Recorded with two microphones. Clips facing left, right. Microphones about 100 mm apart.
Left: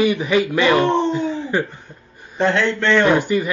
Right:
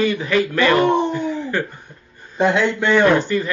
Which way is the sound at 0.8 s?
15° right (ahead or behind).